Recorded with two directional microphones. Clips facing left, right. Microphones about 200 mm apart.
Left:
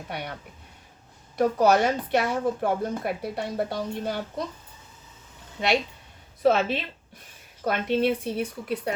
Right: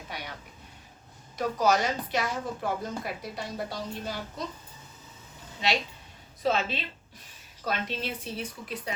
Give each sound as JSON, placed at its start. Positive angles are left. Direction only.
{"t": 0.1, "sound": "speech", "side_deg": 60}
{"t": 1.4, "sound": "speech", "side_deg": 60}
{"t": 6.4, "sound": "speech", "side_deg": 60}